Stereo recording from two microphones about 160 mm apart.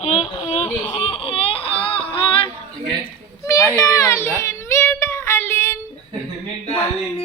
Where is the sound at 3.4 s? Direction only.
20° left (ahead or behind).